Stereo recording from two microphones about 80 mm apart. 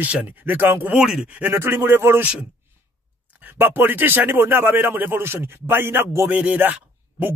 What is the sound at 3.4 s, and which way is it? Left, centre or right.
Speech, right.